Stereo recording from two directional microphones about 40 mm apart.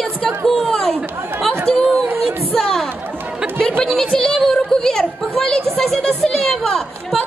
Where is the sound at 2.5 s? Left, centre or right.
Centre.